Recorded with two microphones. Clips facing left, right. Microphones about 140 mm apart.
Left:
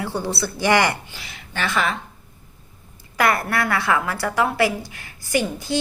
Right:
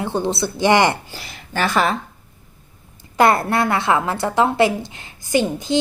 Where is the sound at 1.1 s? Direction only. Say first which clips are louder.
Right 6 dB; 40° right (ahead or behind).